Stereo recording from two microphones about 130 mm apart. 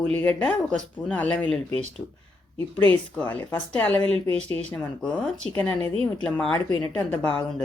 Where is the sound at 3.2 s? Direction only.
10° left (ahead or behind).